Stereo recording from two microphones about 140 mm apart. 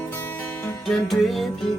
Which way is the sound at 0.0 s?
20° left (ahead or behind).